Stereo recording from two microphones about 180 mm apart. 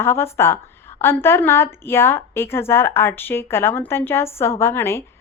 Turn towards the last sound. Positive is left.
turn(degrees=15)  # may be behind; listen again after turning